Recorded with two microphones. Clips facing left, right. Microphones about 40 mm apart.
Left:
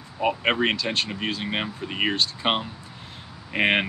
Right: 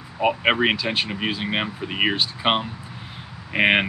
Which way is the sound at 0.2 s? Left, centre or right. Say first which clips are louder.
Right 3 dB; centre.